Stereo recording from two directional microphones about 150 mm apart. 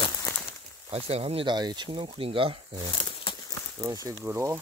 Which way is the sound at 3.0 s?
35° left (ahead or behind).